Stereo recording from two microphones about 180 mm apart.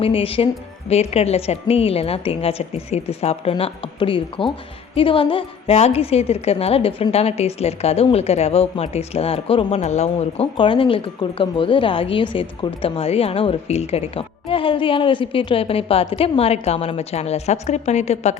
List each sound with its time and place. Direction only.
0.0 s a woman's voice: 30° left (ahead or behind)